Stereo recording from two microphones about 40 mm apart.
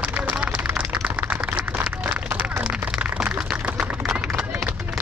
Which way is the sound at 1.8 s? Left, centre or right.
Right.